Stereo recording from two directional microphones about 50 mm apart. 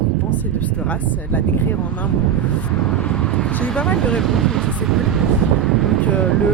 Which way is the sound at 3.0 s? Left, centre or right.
Left.